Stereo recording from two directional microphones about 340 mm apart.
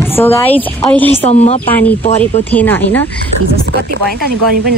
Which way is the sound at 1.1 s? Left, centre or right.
Centre.